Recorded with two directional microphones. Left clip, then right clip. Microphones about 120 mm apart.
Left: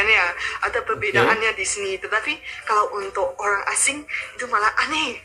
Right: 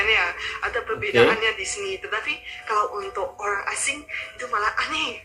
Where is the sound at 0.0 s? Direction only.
45° left (ahead or behind).